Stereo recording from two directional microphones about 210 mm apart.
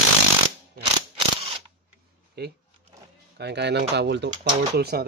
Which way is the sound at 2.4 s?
50° right (ahead or behind).